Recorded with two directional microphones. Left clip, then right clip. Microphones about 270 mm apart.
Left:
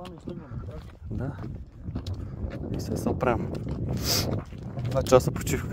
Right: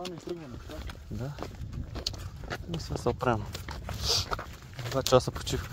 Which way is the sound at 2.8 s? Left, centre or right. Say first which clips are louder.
Left 3 dB; left.